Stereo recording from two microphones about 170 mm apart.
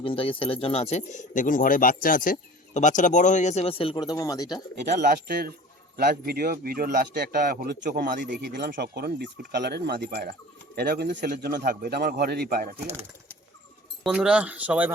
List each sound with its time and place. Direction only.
0.0 s speech: 30° left (ahead or behind)
4.9 s a man's voice: 65° right (ahead or behind)
8.2 s speech: 90° right
8.8 s a man's voice: 70° right (ahead or behind)
14.0 s speech: 5° right (ahead or behind)